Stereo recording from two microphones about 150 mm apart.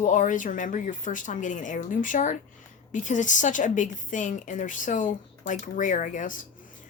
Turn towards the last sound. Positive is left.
turn(degrees=60)  # may be behind; listen again after turning